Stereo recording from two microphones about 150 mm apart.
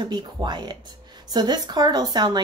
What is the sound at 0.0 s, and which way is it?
Speech, 30° right (ahead or behind).